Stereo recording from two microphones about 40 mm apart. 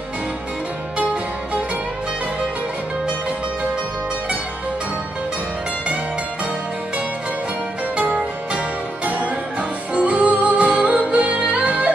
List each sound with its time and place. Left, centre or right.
7.9 s music: right